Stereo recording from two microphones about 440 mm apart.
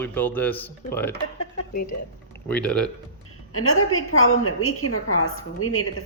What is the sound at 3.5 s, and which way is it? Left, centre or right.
A woman's voice, left.